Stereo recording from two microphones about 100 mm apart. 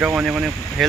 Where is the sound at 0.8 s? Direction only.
Centre (ahead or behind).